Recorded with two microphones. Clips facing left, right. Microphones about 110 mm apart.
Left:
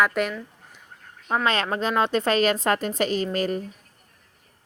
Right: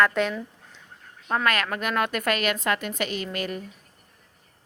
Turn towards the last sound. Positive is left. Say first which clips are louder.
# left 6 dB
turn(degrees=35)  # may be behind; listen again after turning